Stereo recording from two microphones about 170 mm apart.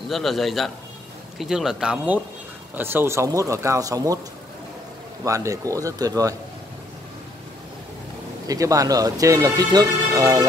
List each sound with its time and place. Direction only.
0.1 s a man's voice: centre (ahead or behind); by 4.2 s 20° right (ahead or behind)
5.2 s speech: 20° right (ahead or behind)
8.5 s speech: 20° right (ahead or behind)